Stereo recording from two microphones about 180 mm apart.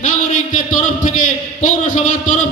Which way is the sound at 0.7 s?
50° left (ahead or behind).